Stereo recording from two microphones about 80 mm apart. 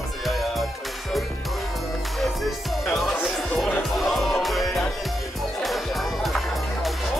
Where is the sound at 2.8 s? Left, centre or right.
Centre.